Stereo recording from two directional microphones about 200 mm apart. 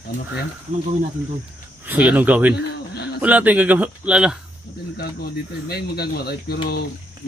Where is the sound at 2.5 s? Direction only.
55° left (ahead or behind).